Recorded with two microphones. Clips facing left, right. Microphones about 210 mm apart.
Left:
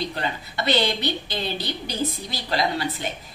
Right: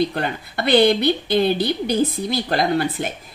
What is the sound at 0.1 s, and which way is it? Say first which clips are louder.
Speech: right 4 dB; 55° right (ahead or behind).